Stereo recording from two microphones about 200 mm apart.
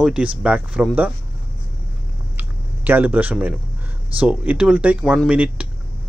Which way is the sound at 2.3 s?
10° right (ahead or behind).